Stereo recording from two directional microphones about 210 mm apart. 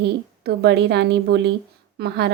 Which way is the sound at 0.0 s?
50° right (ahead or behind).